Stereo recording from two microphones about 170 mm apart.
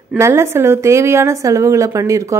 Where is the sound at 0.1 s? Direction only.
15° right (ahead or behind).